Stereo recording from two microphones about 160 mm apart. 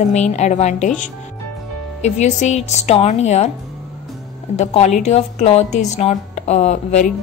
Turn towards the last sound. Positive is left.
turn(degrees=45)  # may be behind; listen again after turning